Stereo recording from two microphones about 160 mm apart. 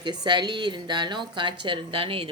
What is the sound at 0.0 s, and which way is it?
Speech, 25° right (ahead or behind).